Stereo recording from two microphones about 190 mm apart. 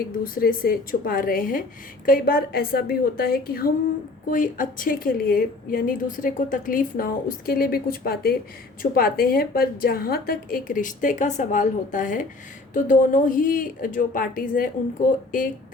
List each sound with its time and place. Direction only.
0.3 s a woman's voice: 50° left (ahead or behind)